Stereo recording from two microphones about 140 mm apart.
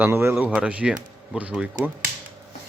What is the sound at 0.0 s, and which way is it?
Speech, 15° right (ahead or behind).